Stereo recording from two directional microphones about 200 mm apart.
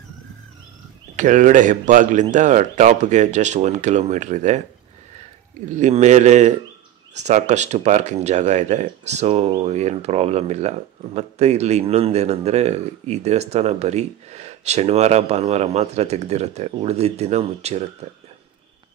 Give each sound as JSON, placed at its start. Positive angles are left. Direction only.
{"t": 1.1, "sound": "speech", "side_deg": -40}
{"t": 5.7, "sound": "speech", "side_deg": -35}